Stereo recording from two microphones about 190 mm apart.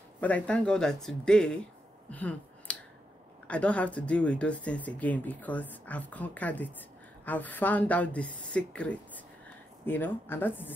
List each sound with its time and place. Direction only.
0.2 s speech: 5° left (ahead or behind)